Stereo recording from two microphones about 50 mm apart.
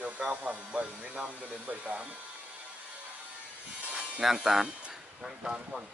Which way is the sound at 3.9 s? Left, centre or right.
Centre.